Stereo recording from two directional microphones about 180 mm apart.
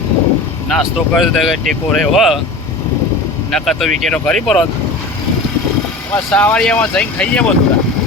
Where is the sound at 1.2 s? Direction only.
Centre (ahead or behind).